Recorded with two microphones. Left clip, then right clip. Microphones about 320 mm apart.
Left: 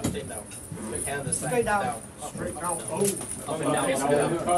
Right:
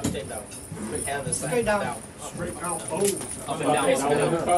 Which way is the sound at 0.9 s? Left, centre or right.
Centre.